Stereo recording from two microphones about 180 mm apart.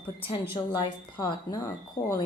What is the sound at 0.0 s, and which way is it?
A woman's voice, 30° left (ahead or behind).